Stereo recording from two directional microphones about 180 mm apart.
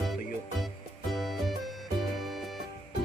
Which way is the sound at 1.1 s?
Centre (ahead or behind).